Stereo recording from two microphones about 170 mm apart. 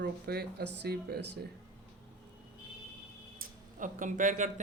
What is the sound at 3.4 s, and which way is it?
Speech, 50° right (ahead or behind).